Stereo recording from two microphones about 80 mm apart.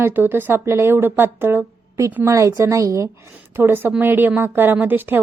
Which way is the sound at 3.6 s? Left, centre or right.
Right.